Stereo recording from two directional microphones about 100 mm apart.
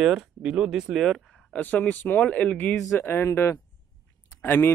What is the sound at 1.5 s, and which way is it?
Speech, 15° left (ahead or behind).